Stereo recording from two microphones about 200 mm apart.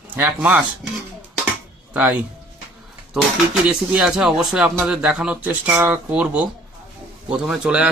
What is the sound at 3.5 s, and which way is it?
Speech, 5° right (ahead or behind).